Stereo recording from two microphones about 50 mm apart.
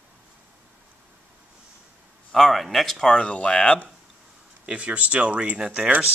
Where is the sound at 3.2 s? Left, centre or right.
Left.